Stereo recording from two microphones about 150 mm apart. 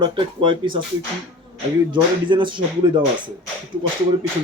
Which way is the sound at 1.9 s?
30° right (ahead or behind).